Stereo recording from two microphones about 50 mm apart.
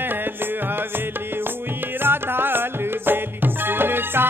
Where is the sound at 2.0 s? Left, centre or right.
Right.